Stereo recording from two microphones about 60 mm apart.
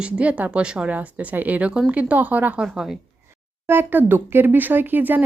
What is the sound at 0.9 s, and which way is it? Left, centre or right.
Speech, right.